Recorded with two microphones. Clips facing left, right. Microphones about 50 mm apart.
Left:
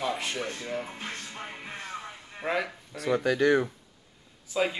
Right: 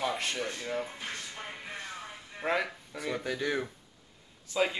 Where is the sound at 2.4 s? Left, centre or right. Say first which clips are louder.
Left 1 dB; centre.